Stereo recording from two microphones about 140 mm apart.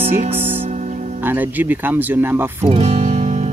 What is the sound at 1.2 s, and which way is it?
Speech, 15° right (ahead or behind).